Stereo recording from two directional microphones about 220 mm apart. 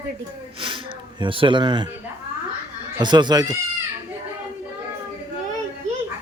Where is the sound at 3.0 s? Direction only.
20° right (ahead or behind).